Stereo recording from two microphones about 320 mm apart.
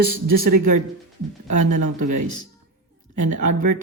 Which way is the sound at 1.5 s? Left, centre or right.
Right.